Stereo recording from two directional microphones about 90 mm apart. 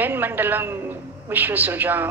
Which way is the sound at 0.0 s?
20° right (ahead or behind).